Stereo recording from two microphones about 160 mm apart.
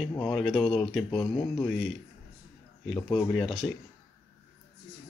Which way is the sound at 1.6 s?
Centre (ahead or behind).